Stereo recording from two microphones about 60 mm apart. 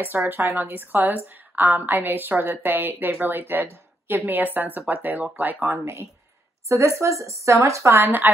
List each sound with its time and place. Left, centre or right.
0.0 s a woman's voice: right
7.0 s speech: right